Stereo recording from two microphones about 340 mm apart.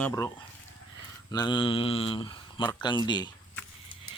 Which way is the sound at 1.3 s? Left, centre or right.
Centre.